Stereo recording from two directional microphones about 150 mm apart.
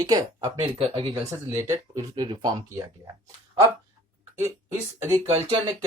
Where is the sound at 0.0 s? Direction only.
25° right (ahead or behind).